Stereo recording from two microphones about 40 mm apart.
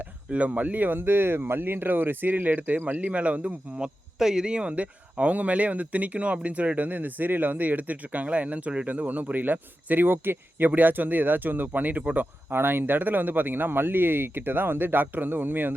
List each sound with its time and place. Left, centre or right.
0.3 s speech: right
0.9 s speech: right
3.8 s speech: centre
4.7 s speech: right
8.9 s speech: right
12.2 s speech: right